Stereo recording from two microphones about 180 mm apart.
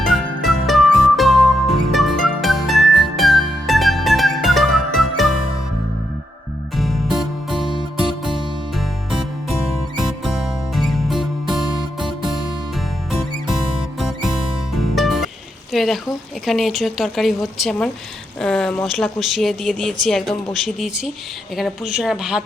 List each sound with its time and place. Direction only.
0.0 s music: centre (ahead or behind)
7.2 s music: centre (ahead or behind)
7.7 s music: 25° right (ahead or behind)
8.0 s music: centre (ahead or behind)
14.9 s music: centre (ahead or behind)
15.7 s speech: centre (ahead or behind)